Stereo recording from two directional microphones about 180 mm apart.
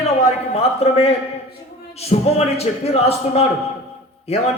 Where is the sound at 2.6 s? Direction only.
35° left (ahead or behind).